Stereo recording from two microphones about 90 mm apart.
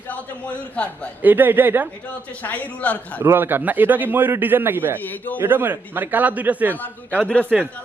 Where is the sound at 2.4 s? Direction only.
15° left (ahead or behind).